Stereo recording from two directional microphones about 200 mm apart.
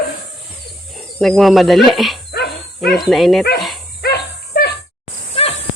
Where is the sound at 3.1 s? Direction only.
Centre (ahead or behind).